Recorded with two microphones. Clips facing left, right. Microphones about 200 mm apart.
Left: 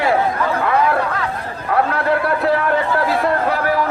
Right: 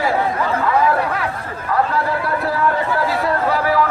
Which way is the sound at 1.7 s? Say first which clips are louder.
Left 2 dB; 65° left (ahead or behind).